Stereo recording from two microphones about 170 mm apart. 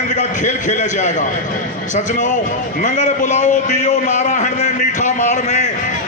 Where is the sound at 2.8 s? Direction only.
45° left (ahead or behind).